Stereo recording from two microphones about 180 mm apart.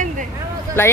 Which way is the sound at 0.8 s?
10° left (ahead or behind).